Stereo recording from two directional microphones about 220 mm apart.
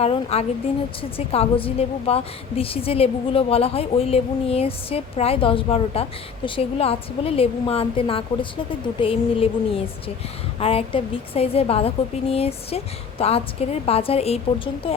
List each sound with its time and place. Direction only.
0.0 s a woman's voice: 30° left (ahead or behind)